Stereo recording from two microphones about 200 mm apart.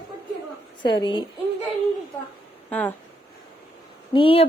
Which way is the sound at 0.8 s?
25° left (ahead or behind).